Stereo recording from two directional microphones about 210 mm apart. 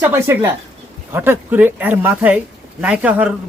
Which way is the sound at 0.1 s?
10° right (ahead or behind).